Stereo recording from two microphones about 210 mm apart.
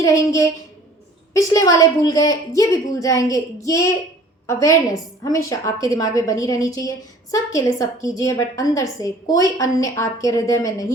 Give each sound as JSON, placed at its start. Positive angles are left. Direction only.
{"t": 0.0, "sound": "a woman's voice", "side_deg": 15}